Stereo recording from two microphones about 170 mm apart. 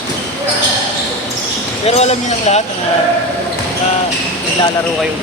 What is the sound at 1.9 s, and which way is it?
Speech, 40° left (ahead or behind).